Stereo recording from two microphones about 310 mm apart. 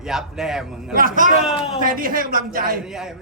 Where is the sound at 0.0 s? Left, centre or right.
Centre.